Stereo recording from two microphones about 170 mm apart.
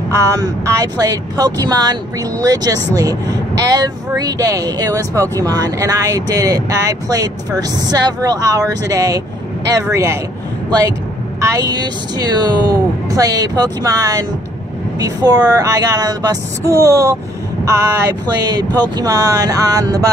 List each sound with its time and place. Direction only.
0.1 s speech: 20° right (ahead or behind)
11.4 s speech: 20° right (ahead or behind)